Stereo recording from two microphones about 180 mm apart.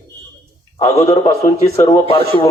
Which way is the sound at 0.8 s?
15° left (ahead or behind).